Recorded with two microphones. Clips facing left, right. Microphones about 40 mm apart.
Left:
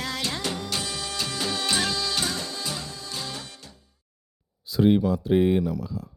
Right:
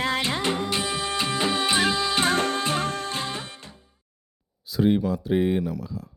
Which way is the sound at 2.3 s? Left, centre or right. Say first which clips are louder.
Right 8 dB; right.